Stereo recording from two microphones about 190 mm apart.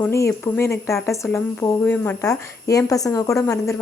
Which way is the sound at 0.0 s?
15° left (ahead or behind).